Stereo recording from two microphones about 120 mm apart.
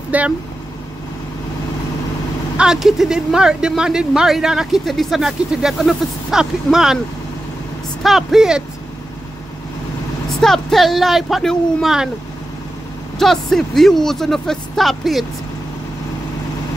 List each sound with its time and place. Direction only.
0.1 s speech: 10° right (ahead or behind)
2.5 s speech: 5° right (ahead or behind)
8.0 s speech: centre (ahead or behind)
10.4 s speech: centre (ahead or behind)
13.2 s speech: 5° left (ahead or behind)